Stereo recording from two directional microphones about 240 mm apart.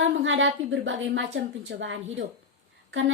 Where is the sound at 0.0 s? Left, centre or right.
Right.